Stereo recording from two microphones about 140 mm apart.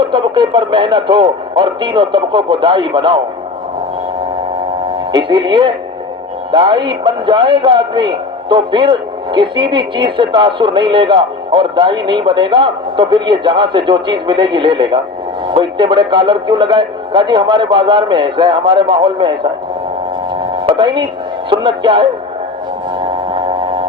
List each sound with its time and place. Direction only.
0.1 s a man's voice: 35° right (ahead or behind)
4.9 s a man's voice: 35° right (ahead or behind)
20.7 s a man's voice: 35° right (ahead or behind)